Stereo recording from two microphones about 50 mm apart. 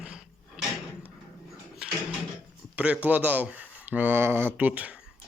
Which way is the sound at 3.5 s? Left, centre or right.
Right.